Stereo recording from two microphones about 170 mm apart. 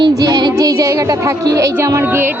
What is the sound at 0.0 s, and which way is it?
Music, 20° right (ahead or behind).